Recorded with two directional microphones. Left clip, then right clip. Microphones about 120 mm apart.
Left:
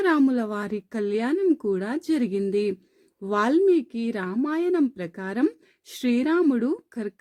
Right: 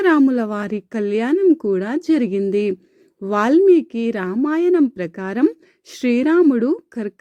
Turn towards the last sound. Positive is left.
turn(degrees=-30)  # may be behind; listen again after turning